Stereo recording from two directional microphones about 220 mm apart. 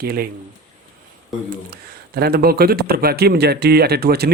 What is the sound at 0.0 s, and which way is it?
Speech, 45° right (ahead or behind).